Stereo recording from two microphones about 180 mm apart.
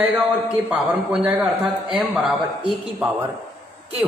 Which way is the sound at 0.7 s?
10° right (ahead or behind).